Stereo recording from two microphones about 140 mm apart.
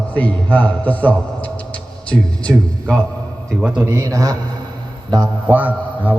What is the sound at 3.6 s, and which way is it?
Speech, 10° right (ahead or behind).